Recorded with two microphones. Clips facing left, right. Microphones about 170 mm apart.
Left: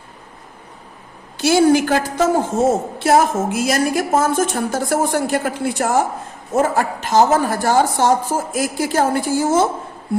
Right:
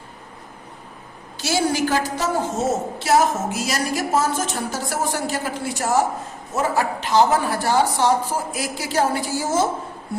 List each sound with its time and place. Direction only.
1.4 s a woman's voice: 55° left (ahead or behind)